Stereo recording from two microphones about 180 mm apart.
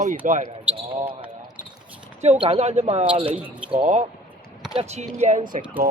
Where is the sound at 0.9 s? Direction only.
30° right (ahead or behind).